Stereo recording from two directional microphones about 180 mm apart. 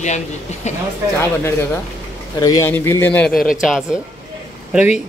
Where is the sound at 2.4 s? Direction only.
15° left (ahead or behind).